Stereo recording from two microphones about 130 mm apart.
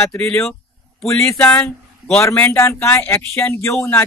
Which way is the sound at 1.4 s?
15° left (ahead or behind).